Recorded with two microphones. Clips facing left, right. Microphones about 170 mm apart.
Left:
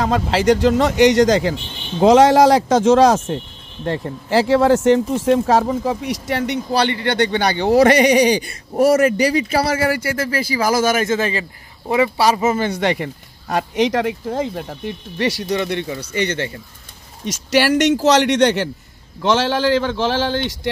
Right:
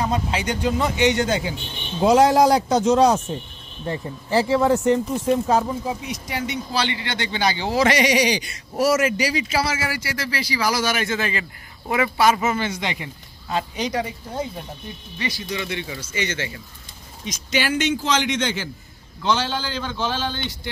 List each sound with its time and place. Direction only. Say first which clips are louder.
0.0 s speech: left 7 dB; 90° left
3.8 s speech: left 5 dB; 75° left (ahead or behind); by 8.9 s 55° left (ahead or behind)
8.9 s speech: left 6 dB; 35° left (ahead or behind)
9.5 s speech: left 6 dB; 60° left (ahead or behind); by 12.6 s 35° left (ahead or behind)
12.6 s speech: left 8 dB; 60° left (ahead or behind); by 15.5 s 75° left (ahead or behind)
15.6 s speech: left 7 dB; 55° left (ahead or behind)
17.2 s speech: left 8 dB; 75° left (ahead or behind)
19.2 s speech: left 7 dB; 90° left